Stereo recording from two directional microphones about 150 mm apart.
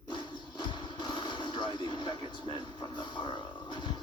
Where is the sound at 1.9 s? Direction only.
30° left (ahead or behind).